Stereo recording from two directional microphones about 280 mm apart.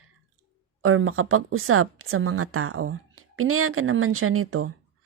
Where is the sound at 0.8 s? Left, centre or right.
Right.